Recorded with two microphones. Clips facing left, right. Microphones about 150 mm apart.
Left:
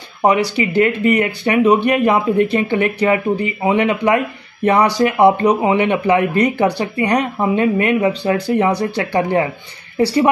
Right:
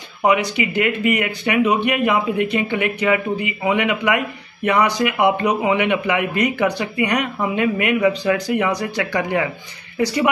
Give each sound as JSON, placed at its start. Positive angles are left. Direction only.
{"t": 0.2, "sound": "speech", "side_deg": 35}